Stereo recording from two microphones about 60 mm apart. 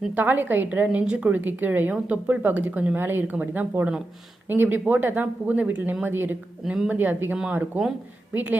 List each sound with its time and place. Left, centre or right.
0.2 s a woman's voice: right